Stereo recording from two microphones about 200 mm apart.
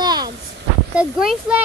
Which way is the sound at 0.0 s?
20° right (ahead or behind).